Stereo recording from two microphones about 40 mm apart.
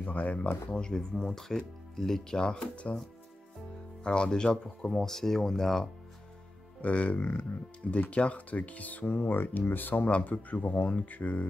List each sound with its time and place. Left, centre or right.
0.0 s speech: left
0.7 s speech: centre
2.4 s speech: left
4.0 s speech: left
6.8 s speech: left